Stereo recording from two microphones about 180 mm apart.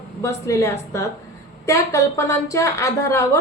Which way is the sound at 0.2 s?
15° left (ahead or behind).